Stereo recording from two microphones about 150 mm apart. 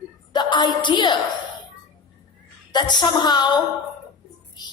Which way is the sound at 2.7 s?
30° left (ahead or behind).